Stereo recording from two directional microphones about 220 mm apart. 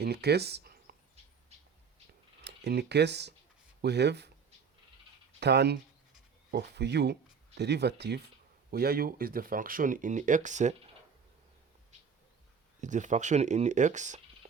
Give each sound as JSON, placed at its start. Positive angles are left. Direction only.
{"t": 0.0, "sound": "a sound", "side_deg": -45}
{"t": 2.4, "sound": "speech", "side_deg": -50}
{"t": 5.4, "sound": "speech", "side_deg": -50}
{"t": 12.8, "sound": "speech", "side_deg": -35}